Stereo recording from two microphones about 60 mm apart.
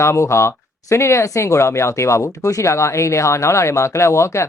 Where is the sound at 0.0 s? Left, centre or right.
Left.